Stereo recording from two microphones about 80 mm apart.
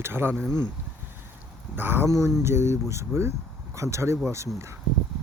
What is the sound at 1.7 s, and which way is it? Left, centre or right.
Speech, right.